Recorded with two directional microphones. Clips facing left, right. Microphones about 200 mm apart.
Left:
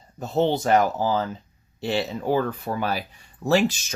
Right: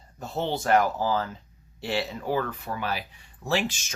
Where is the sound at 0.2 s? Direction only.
20° left (ahead or behind).